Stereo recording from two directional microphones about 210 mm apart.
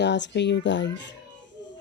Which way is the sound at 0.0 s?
55° left (ahead or behind).